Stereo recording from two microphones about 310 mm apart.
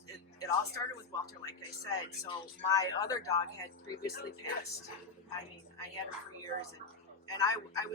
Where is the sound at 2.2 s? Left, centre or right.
Centre.